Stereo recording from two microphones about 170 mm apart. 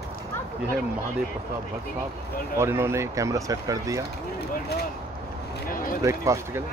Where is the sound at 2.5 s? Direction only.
15° right (ahead or behind).